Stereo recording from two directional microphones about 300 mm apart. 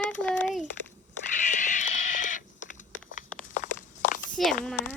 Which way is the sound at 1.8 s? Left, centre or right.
Left.